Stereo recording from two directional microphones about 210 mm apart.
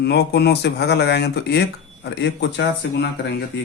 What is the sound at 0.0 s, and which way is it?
Speech, 50° left (ahead or behind).